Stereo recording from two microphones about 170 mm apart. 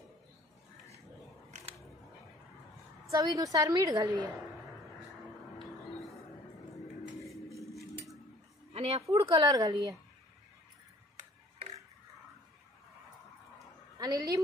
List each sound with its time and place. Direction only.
3.1 s a woman's voice: 20° right (ahead or behind)
7.5 s cutlery: 20° left (ahead or behind)
8.7 s a sound: 35° right (ahead or behind)
9.1 s a woman's voice: 25° right (ahead or behind)
13.9 s a woman's voice: 20° right (ahead or behind)